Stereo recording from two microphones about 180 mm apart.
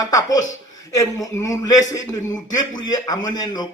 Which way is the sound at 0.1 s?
20° left (ahead or behind).